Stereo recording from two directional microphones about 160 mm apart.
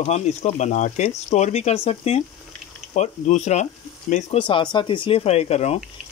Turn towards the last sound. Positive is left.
turn(degrees=40)  # may be behind; listen again after turning